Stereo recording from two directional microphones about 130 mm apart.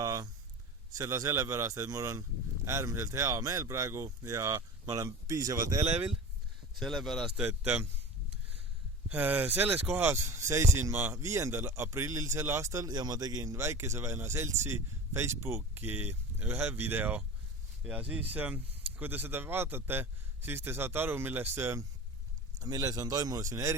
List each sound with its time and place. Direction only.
0.0 s a sound: 25° right (ahead or behind)
0.9 s speech: 25° right (ahead or behind)
6.7 s a man's voice: centre (ahead or behind)
9.0 s speech: 15° right (ahead or behind)